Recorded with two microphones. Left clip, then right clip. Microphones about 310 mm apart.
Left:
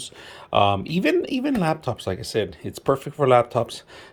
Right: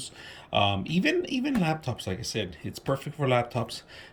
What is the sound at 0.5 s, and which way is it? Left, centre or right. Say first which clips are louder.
Speech: left 6 dB; centre.